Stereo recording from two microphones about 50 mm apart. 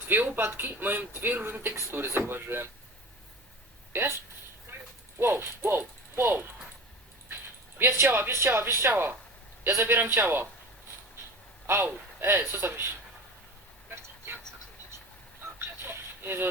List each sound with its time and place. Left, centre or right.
0.1 s a man's voice: right
3.9 s speech: right
4.7 s a sound: right
5.2 s a man's voice: right
7.8 s a man's voice: right
11.6 s a man's voice: right
15.5 s music: right